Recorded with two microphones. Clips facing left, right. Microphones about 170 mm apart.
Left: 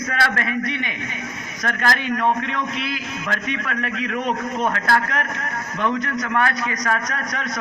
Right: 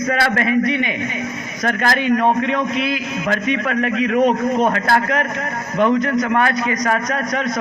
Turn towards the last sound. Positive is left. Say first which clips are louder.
# right 7 dB
turn(degrees=-20)  # may be behind; listen again after turning